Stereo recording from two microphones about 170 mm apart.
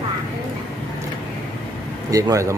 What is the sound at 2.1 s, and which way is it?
Speech, 20° right (ahead or behind).